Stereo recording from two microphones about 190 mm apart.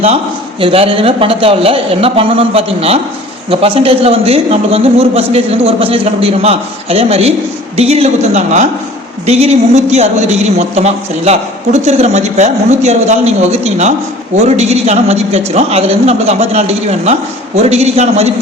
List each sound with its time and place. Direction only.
0.6 s a man's voice: 30° right (ahead or behind)